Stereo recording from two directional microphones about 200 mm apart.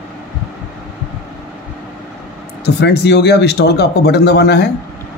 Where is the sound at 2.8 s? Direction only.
55° left (ahead or behind).